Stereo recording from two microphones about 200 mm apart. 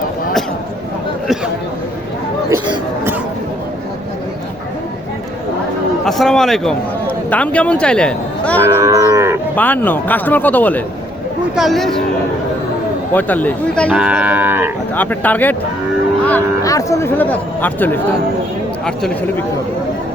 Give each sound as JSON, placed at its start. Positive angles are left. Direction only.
{"t": 2.5, "sound": "a sound", "side_deg": -10}
{"t": 6.1, "sound": "a man's voice", "side_deg": 0}
{"t": 8.6, "sound": "cattle", "side_deg": -15}
{"t": 9.6, "sound": "a man's voice", "side_deg": 10}
{"t": 13.1, "sound": "speech", "side_deg": 10}
{"t": 13.9, "sound": "moo", "side_deg": -5}
{"t": 14.9, "sound": "a man's voice", "side_deg": 10}